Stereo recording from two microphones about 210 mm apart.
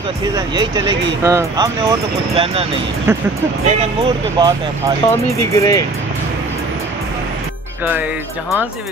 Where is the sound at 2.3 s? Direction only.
25° right (ahead or behind).